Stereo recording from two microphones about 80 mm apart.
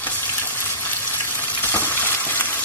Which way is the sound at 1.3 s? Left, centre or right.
Left.